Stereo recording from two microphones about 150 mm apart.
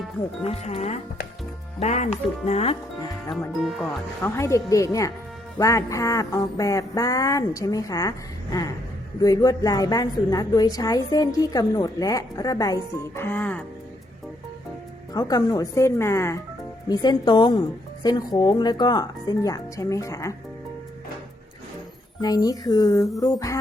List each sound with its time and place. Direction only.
0.4 s speech: 45° left (ahead or behind)
3.6 s speech: centre (ahead or behind)
4.2 s a woman's voice: 20° left (ahead or behind)
9.2 s a woman's voice: 25° left (ahead or behind)
15.1 s a woman's voice: 25° left (ahead or behind)
16.9 s a woman's voice: 30° left (ahead or behind)
22.2 s a woman's voice: 25° left (ahead or behind)